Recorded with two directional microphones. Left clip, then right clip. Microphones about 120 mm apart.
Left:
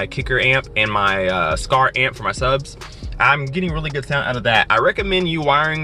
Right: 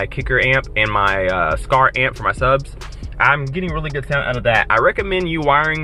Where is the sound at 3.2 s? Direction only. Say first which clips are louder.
Even; 30° left (ahead or behind).